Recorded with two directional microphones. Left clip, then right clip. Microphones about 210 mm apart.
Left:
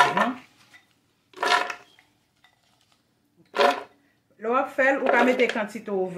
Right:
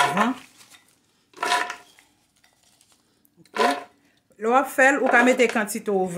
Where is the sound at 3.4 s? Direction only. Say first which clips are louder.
Left 1 dB; centre (ahead or behind).